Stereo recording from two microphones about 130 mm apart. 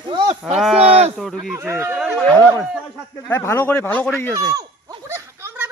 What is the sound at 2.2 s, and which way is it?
A man's voice, 15° left (ahead or behind).